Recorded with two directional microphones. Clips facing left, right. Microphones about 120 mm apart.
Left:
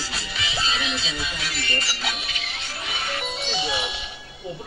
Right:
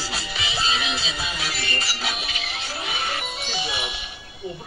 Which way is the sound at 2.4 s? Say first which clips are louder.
Right 3 dB; 5° right (ahead or behind).